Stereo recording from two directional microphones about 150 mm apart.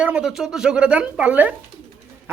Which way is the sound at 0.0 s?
5° right (ahead or behind).